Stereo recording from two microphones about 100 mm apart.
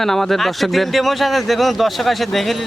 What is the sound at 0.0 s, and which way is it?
Speech, 5° left (ahead or behind).